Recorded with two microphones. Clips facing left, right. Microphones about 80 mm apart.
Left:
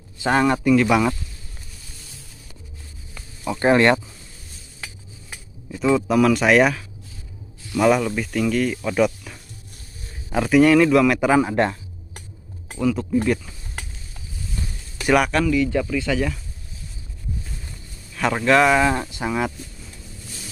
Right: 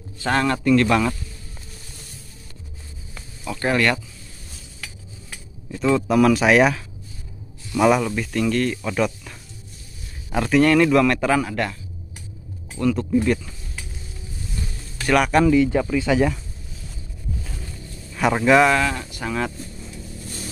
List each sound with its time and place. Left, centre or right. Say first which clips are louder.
0.2 s speech: left 2 dB; centre
3.4 s speech: left 5 dB; left
4.7 s cutlery: left 1 dB; left
5.7 s speech: even; centre; by 11.8 s left
12.7 s speech: right 1 dB; centre
13.8 s a sound: left 3 dB; left
15.0 s speech: left 1 dB; centre
15.4 s speech: right 4 dB; right
15.7 s speech: right 2 dB; centre
18.1 s speech: right 2 dB; centre
18.9 s speech: left 4 dB; left